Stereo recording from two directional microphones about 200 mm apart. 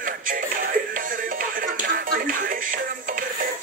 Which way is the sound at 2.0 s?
45° right (ahead or behind).